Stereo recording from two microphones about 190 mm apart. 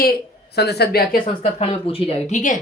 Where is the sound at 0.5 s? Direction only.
60° left (ahead or behind).